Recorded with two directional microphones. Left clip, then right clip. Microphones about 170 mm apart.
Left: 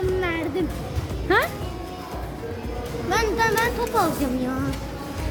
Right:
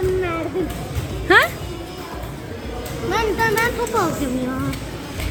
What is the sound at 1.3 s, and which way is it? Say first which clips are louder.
Music: right 7 dB; 5° left (ahead or behind).